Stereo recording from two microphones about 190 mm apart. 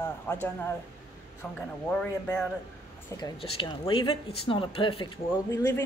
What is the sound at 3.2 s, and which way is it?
Speech, 25° left (ahead or behind).